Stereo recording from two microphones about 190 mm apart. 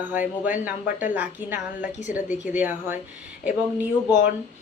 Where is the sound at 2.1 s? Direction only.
50° left (ahead or behind).